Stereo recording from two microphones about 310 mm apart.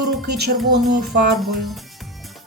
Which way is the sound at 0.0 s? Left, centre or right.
Right.